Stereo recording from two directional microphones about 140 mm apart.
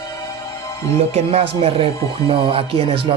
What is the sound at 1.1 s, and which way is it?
Speech, 45° right (ahead or behind).